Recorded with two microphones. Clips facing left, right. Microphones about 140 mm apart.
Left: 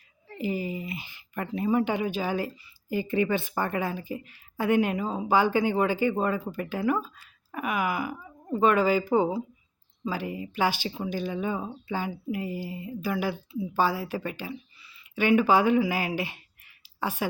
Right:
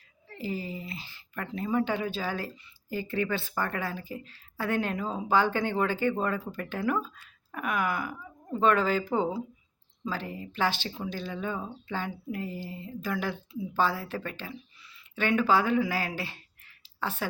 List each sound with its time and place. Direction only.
0.3 s speech: 15° left (ahead or behind)